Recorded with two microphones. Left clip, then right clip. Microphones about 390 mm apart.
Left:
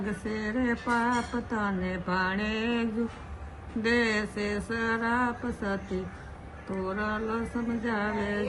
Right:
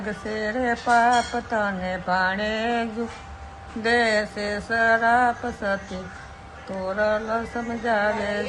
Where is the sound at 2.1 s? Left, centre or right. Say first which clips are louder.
Right 6 dB; centre.